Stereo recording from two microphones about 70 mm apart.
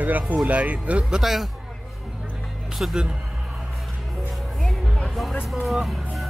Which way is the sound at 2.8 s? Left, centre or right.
Centre.